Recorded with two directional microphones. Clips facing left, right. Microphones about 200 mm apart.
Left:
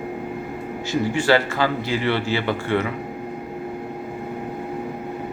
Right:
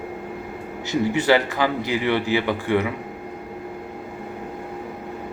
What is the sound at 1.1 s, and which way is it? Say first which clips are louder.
A man's voice: even; 20° right (ahead or behind).